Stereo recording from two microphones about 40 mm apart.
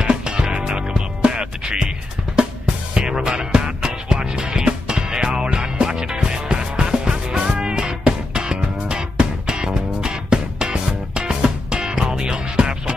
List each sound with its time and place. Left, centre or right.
0.0 s music: right
2.9 s music: right